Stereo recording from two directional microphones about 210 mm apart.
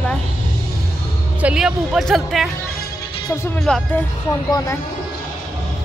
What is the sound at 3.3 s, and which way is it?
A woman's voice, 15° left (ahead or behind).